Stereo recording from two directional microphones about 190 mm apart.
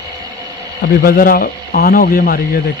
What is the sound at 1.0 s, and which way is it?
Speech, 50° left (ahead or behind).